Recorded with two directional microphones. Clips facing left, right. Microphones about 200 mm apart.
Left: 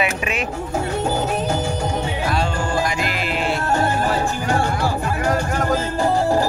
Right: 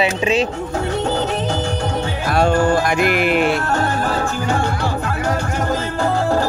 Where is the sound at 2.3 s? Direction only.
55° right (ahead or behind).